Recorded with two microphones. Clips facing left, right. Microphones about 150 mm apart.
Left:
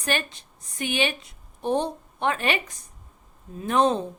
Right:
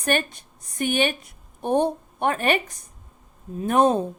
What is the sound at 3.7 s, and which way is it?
Speech, 50° right (ahead or behind).